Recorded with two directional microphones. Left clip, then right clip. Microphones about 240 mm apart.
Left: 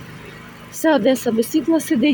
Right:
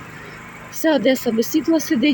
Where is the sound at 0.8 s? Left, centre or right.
Centre.